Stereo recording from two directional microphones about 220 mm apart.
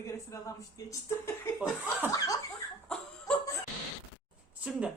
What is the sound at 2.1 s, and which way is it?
Speech, 15° left (ahead or behind).